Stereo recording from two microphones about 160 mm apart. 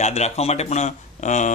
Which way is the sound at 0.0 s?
45° left (ahead or behind).